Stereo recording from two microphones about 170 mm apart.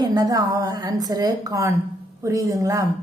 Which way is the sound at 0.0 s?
20° right (ahead or behind).